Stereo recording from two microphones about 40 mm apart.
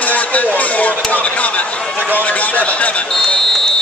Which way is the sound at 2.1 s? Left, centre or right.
Left.